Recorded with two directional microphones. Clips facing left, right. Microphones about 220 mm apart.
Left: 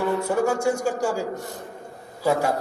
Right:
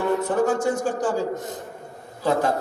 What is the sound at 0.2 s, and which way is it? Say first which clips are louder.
Speech: right 1 dB; 10° left (ahead or behind).